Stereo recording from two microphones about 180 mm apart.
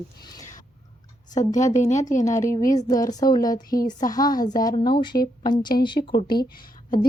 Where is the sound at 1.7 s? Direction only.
40° left (ahead or behind).